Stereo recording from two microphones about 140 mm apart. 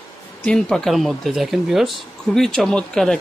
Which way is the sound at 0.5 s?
5° left (ahead or behind).